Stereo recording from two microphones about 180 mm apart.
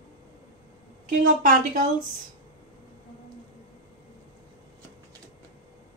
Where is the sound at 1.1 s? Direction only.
50° right (ahead or behind).